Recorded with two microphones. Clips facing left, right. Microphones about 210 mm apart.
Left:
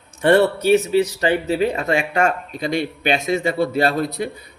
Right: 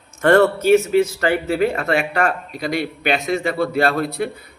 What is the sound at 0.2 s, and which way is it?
A man's voice, 15° left (ahead or behind).